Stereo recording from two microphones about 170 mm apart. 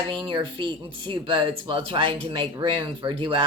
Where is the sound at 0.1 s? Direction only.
30° right (ahead or behind).